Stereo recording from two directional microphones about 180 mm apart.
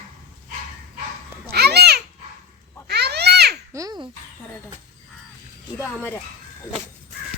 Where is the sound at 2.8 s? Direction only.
65° right (ahead or behind).